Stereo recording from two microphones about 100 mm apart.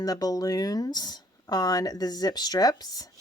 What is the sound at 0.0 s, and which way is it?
Speech, 40° left (ahead or behind).